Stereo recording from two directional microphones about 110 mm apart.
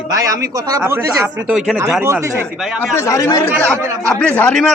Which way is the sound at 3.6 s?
10° left (ahead or behind).